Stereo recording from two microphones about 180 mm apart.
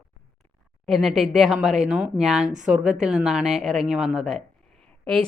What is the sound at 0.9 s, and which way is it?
A woman's voice, centre (ahead or behind).